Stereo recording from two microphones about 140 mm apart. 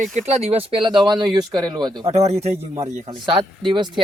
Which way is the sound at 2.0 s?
50° right (ahead or behind).